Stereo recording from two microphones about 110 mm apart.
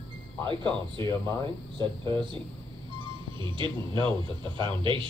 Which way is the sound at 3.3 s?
45° right (ahead or behind).